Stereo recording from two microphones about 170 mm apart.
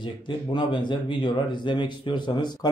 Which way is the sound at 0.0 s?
25° left (ahead or behind).